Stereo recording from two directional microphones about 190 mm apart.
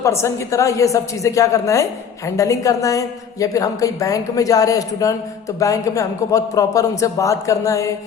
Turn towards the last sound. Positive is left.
turn(degrees=15)  # may be behind; listen again after turning